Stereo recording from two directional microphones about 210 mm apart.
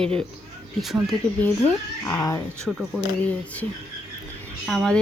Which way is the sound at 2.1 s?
10° left (ahead or behind).